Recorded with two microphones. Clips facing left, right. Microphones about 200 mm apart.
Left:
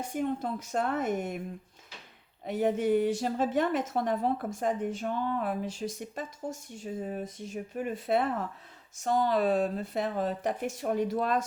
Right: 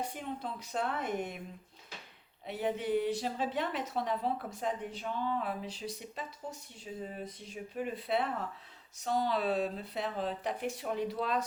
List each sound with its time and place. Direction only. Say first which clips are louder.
0.0 s a woman's voice: left 7 dB; 45° left (ahead or behind)
2.4 s a woman's voice: left 7 dB; 45° left (ahead or behind)